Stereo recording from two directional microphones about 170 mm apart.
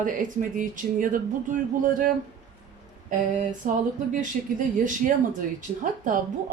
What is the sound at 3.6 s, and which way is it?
Speech, 50° right (ahead or behind).